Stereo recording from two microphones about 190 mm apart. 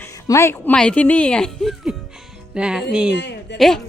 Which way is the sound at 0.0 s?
15° left (ahead or behind).